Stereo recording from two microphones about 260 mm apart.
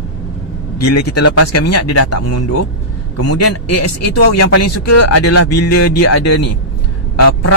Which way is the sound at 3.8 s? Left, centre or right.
Left.